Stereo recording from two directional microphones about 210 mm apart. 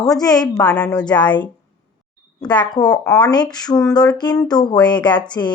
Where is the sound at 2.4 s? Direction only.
20° left (ahead or behind).